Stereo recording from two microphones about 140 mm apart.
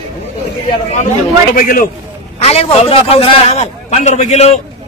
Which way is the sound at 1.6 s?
90° left.